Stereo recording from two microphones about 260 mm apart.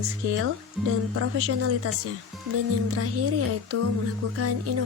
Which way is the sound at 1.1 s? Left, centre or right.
Right.